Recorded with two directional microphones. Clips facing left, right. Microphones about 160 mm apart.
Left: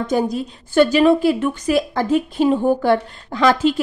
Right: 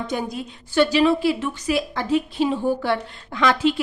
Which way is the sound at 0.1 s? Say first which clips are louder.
Left 7 dB; 45° left (ahead or behind).